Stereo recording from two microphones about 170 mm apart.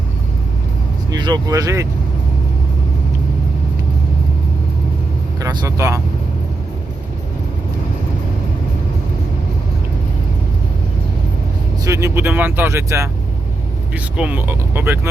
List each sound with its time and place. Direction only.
1.1 s speech: 25° right (ahead or behind)
5.4 s speech: 20° right (ahead or behind)
11.9 s speech: 15° right (ahead or behind)